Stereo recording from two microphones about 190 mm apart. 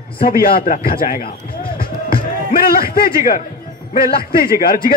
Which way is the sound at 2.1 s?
50° left (ahead or behind).